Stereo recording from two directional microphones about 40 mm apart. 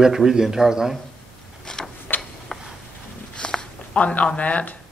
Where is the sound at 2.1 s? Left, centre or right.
Left.